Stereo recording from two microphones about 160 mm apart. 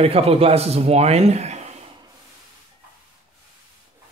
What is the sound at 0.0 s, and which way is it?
A man's voice, 40° right (ahead or behind).